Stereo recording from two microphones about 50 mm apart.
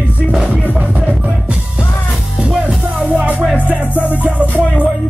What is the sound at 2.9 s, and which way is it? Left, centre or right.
Music, right.